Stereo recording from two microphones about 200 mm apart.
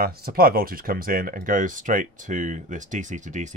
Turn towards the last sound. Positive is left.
turn(degrees=-35)  # may be behind; listen again after turning